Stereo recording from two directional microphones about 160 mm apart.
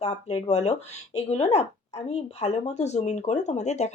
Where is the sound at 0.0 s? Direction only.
45° left (ahead or behind).